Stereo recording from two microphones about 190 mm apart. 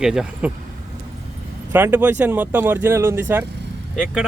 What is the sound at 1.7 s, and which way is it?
Speech, 10° right (ahead or behind).